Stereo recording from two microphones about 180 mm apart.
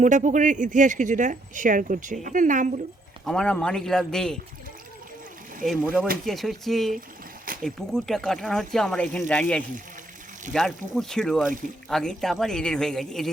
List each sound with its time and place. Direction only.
0.0 s speech: 45° right (ahead or behind)
3.2 s speech: 5° left (ahead or behind)
5.6 s speech: 5° right (ahead or behind)